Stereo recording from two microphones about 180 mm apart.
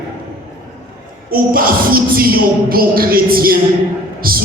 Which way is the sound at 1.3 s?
55° right (ahead or behind).